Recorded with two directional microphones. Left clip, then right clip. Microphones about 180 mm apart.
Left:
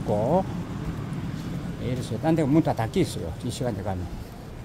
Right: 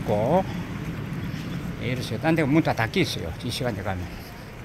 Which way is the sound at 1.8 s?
10° left (ahead or behind).